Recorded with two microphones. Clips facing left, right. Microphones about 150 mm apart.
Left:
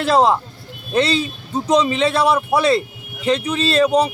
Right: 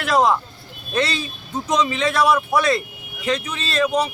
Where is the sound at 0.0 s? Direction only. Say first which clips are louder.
Left 3 dB; 30° left (ahead or behind).